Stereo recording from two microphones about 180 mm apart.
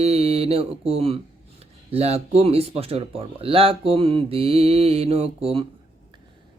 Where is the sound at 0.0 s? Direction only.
35° right (ahead or behind).